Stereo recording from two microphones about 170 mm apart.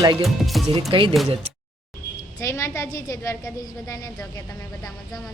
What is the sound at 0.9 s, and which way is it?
Speech, 30° right (ahead or behind).